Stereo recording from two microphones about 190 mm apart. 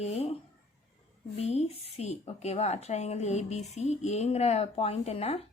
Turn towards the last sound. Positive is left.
turn(degrees=30)  # may be behind; listen again after turning